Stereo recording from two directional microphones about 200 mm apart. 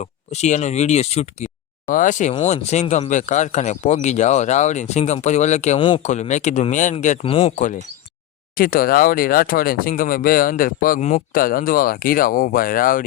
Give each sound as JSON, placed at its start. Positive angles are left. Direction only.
{"t": 0.0, "sound": "speech", "side_deg": 35}
{"t": 7.5, "sound": "speech", "side_deg": 40}